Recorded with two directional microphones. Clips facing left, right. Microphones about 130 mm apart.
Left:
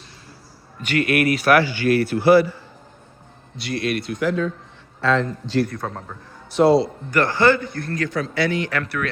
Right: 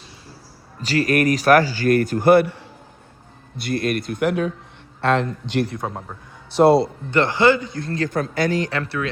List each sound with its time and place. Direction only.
0.8 s a man's voice: 35° right (ahead or behind); by 2.6 s 60° right (ahead or behind)
3.6 s a man's voice: 50° right (ahead or behind)
5.8 s a man's voice: 15° right (ahead or behind)
6.6 s a man's voice: 55° right (ahead or behind)
7.1 s a man's voice: 20° right (ahead or behind)
8.1 s a man's voice: 50° right (ahead or behind); by 9.0 s 25° right (ahead or behind)